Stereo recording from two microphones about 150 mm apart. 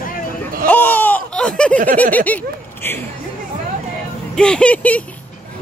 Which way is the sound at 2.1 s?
10° left (ahead or behind).